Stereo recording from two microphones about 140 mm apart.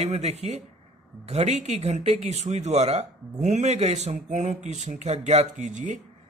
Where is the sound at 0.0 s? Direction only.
50° right (ahead or behind).